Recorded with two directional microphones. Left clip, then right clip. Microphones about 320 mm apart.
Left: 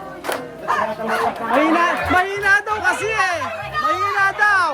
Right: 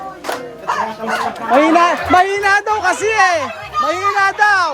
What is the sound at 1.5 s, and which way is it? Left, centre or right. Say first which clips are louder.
A man's voice: right 6 dB; centre.